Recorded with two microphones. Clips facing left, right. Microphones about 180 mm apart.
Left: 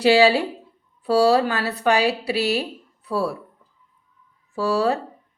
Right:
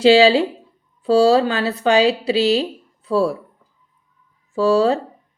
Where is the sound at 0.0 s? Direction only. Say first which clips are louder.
Right 4 dB; 25° right (ahead or behind).